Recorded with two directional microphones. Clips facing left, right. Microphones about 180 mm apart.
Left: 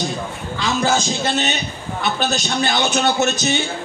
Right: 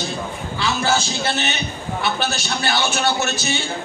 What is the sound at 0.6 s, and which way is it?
A man's voice, 15° left (ahead or behind).